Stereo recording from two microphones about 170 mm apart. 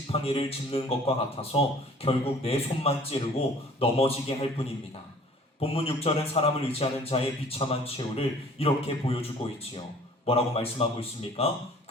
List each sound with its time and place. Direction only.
0.1 s a man's voice: 35° left (ahead or behind)